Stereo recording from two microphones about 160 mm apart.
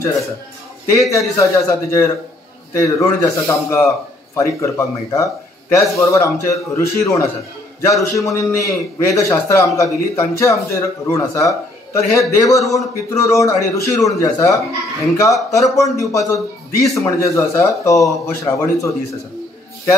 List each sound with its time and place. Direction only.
0.8 s a man's voice: 20° left (ahead or behind)